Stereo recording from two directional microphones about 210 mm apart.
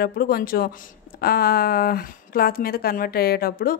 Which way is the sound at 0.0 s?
45° left (ahead or behind).